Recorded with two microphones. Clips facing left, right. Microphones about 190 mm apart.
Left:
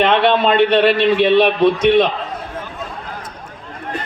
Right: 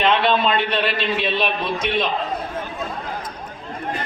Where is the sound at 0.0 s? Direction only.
60° left (ahead or behind).